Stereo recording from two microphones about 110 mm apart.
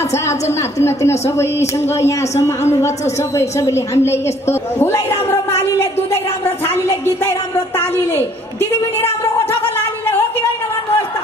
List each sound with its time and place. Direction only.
0.1 s a woman's voice: 25° left (ahead or behind)